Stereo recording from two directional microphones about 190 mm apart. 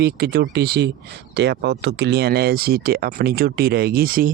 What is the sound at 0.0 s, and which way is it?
Speech, 55° right (ahead or behind).